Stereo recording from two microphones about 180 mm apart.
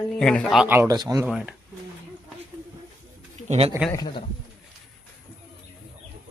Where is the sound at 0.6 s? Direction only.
10° right (ahead or behind).